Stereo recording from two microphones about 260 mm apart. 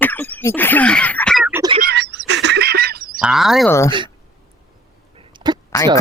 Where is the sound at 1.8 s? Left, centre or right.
Right.